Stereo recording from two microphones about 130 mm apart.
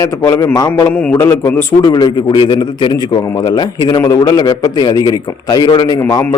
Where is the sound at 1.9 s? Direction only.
35° left (ahead or behind).